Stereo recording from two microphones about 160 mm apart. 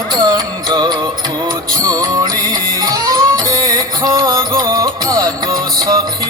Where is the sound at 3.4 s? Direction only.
20° right (ahead or behind).